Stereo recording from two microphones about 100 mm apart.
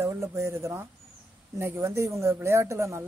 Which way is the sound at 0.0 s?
30° right (ahead or behind).